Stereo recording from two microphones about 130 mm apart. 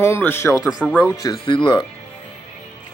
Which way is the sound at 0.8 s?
15° left (ahead or behind).